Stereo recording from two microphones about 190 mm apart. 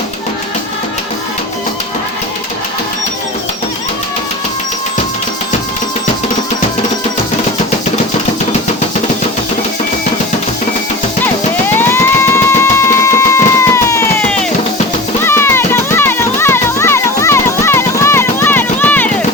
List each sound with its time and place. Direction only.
11.7 s music: 10° left (ahead or behind)